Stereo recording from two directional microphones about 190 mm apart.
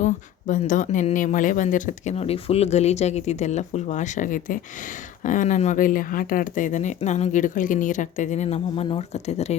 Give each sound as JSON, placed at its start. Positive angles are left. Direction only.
{"t": 0.0, "sound": "speech", "side_deg": 40}